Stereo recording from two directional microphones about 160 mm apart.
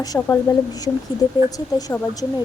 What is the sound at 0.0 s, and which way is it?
Speech, 25° left (ahead or behind).